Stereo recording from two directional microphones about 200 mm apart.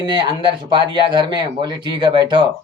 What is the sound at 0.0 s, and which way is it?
Speech, 25° right (ahead or behind).